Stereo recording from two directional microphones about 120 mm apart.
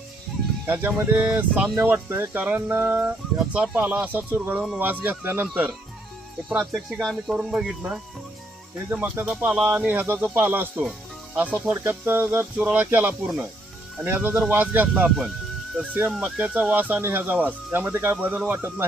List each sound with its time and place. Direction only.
0.7 s speech: 15° right (ahead or behind)
6.6 s speech: centre (ahead or behind)